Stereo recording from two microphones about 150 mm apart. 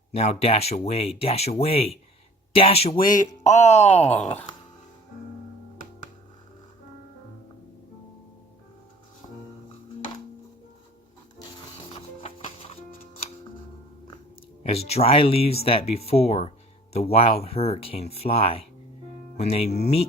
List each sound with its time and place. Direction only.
0.1 s speech: 45° left (ahead or behind)
3.1 s speech: 60° left (ahead or behind)
3.6 s speech: 45° left (ahead or behind)
4.2 s speech: 10° left (ahead or behind)
9.2 s music: 35° left (ahead or behind)
11.9 s music: 40° left (ahead or behind)
14.7 s speech: 45° left (ahead or behind)